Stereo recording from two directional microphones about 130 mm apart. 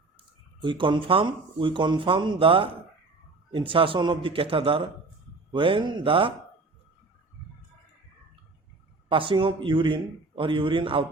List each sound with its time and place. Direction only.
0.6 s speech: 40° right (ahead or behind)
9.0 s speech: 40° right (ahead or behind)